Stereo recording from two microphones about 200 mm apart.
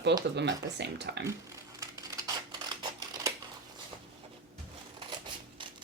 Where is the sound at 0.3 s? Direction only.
60° right (ahead or behind).